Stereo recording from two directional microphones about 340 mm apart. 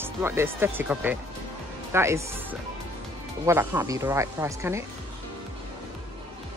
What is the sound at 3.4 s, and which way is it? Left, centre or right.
Speech, centre.